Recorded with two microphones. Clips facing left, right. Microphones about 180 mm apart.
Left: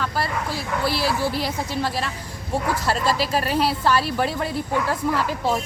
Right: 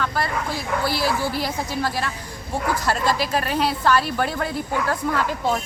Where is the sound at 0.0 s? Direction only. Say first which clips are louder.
Right 1 dB; 5° left (ahead or behind).